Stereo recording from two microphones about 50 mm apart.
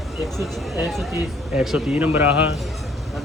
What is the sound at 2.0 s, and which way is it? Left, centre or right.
Speech, right.